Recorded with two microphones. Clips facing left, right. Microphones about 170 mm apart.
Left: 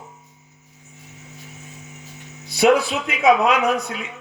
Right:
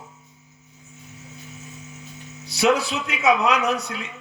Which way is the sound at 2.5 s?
55° left (ahead or behind).